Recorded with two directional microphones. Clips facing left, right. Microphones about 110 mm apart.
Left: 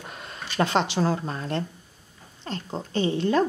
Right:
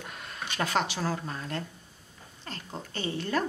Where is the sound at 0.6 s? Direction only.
25° left (ahead or behind).